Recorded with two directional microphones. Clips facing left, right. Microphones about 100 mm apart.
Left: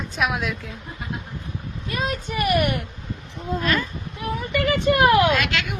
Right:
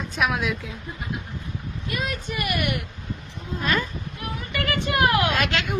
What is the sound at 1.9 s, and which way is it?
Speech, 30° left (ahead or behind).